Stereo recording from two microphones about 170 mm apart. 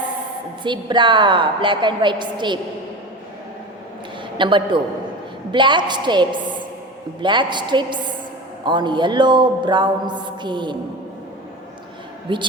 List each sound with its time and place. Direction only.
0.6 s speech: 25° right (ahead or behind)
4.4 s speech: 30° right (ahead or behind)
12.3 s speech: 30° right (ahead or behind)